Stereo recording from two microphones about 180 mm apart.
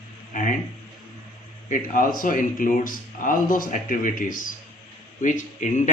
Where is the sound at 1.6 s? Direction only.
50° left (ahead or behind).